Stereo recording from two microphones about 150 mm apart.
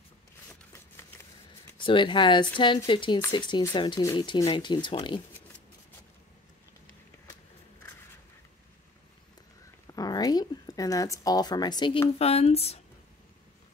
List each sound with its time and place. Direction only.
1.8 s speech: 35° left (ahead or behind)
9.9 s speech: 25° left (ahead or behind); by 12.8 s 45° left (ahead or behind)